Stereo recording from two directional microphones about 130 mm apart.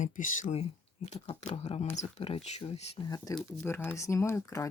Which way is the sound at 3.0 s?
30° left (ahead or behind).